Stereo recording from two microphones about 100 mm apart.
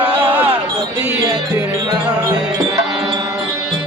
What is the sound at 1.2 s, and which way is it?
Music, 40° right (ahead or behind).